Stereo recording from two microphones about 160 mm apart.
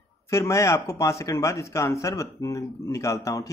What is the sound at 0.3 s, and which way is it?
Speech, 15° left (ahead or behind).